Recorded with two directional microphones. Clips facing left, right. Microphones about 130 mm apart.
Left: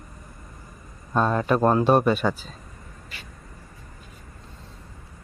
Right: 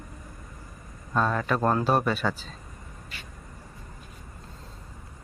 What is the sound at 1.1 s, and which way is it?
Speech, 25° left (ahead or behind).